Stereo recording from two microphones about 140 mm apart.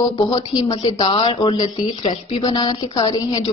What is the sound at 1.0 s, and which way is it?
A woman's voice, 40° left (ahead or behind).